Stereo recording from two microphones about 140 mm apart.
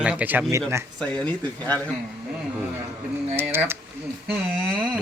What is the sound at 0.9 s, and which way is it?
Speech, 5° left (ahead or behind).